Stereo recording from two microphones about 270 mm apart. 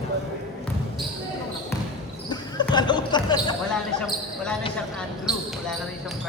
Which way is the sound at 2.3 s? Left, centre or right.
Centre.